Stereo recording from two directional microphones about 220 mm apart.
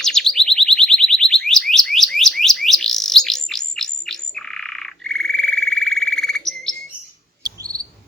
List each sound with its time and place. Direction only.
0.0 s alarm: centre (ahead or behind)
7.4 s cricket: 15° right (ahead or behind)